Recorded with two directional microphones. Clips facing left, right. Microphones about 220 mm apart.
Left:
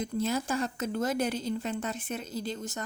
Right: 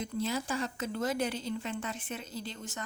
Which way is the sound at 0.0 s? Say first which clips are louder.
Left 3 dB; 45° left (ahead or behind).